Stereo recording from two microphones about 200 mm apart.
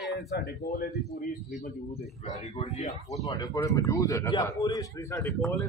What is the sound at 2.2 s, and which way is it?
Speech, 35° left (ahead or behind).